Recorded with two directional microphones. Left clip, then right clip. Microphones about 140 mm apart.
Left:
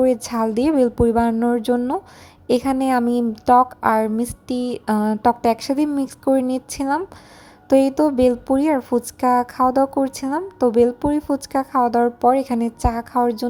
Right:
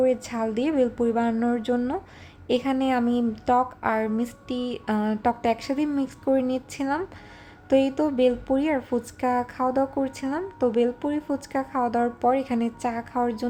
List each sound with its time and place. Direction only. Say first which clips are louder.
0.0 s a woman's voice: left 5 dB; 50° left (ahead or behind)